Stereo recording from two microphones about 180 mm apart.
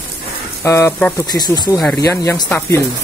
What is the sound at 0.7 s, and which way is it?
Speech, 15° left (ahead or behind).